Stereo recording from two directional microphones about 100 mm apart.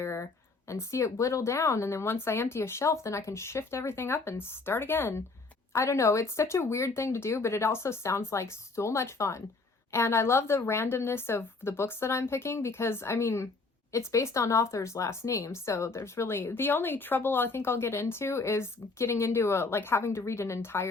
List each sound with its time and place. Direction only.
0.0 s speech: 30° left (ahead or behind)